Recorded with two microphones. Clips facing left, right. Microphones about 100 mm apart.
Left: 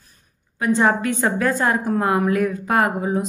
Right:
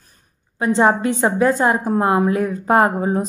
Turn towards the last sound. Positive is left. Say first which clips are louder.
# right 3 dB
turn(degrees=-35)  # may be behind; listen again after turning